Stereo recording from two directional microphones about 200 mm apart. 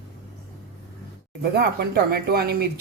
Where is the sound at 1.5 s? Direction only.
50° right (ahead or behind).